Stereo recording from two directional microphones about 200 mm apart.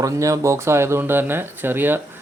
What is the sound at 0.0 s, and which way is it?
Speech, 15° right (ahead or behind).